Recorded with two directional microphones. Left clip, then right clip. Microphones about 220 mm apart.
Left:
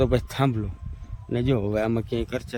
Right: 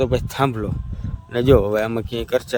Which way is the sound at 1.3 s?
15° right (ahead or behind).